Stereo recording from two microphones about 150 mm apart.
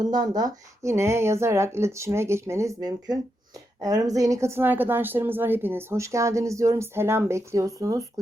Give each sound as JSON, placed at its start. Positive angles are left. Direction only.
{"t": 0.0, "sound": "a woman's voice", "side_deg": -25}